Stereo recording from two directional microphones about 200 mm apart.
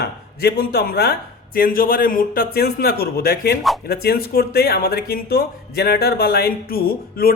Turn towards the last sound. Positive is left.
turn(degrees=50)  # may be behind; listen again after turning